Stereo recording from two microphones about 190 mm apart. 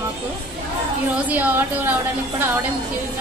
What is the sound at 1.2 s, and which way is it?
Speech, 10° right (ahead or behind).